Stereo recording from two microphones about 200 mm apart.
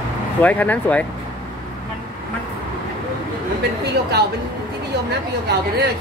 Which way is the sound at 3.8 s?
55° right (ahead or behind).